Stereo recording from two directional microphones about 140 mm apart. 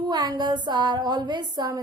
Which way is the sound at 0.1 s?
30° right (ahead or behind).